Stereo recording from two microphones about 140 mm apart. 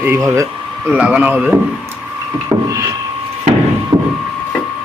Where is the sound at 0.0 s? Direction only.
15° right (ahead or behind).